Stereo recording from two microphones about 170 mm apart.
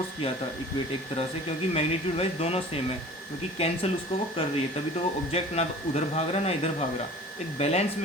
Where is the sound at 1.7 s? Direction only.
35° left (ahead or behind).